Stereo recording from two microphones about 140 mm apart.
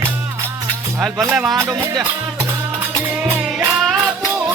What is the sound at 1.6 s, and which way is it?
Speech, 20° right (ahead or behind).